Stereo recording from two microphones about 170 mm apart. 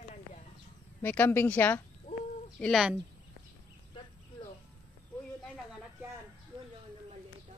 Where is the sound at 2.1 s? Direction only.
50° left (ahead or behind).